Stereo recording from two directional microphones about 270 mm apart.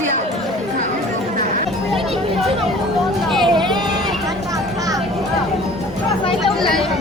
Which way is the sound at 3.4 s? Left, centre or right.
Centre.